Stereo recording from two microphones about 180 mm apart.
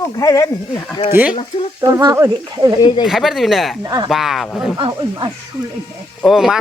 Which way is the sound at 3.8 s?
25° right (ahead or behind).